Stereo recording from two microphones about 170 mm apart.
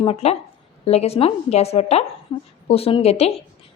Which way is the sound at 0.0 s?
35° left (ahead or behind).